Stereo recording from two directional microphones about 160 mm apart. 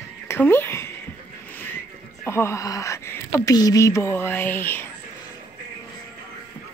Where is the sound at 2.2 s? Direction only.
15° left (ahead or behind).